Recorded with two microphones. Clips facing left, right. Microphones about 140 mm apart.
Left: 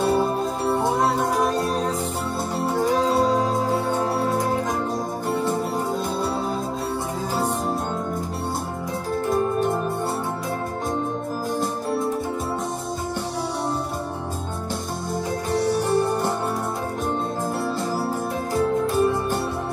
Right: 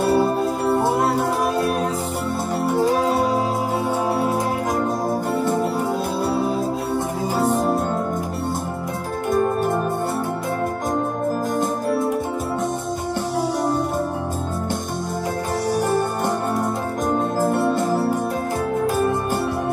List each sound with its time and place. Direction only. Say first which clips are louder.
0.0 s music: right 3 dB; 5° right (ahead or behind)
3.0 s music: even; 10° right (ahead or behind)
15.5 s music: even; 45° right (ahead or behind)
17.1 s organ: right 9 dB; 60° right (ahead or behind)